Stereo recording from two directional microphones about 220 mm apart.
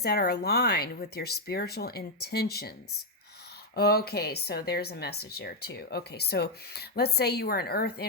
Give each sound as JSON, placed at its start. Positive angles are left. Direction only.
{"t": 0.0, "sound": "speech", "side_deg": 45}
{"t": 3.8, "sound": "speech", "side_deg": 45}